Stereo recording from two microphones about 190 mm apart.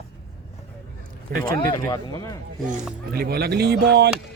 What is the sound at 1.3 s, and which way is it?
Speech, 50° right (ahead or behind).